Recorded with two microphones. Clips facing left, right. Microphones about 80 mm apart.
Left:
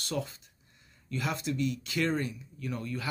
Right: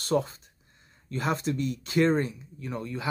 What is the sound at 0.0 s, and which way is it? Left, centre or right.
Speech, right.